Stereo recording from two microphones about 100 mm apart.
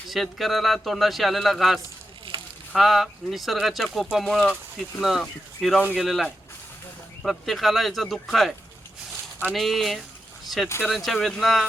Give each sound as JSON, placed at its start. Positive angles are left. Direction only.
{"t": 0.1, "sound": "speech", "side_deg": 0}
{"t": 2.3, "sound": "a sound", "side_deg": -65}
{"t": 2.7, "sound": "speech", "side_deg": 0}
{"t": 9.6, "sound": "speech", "side_deg": 0}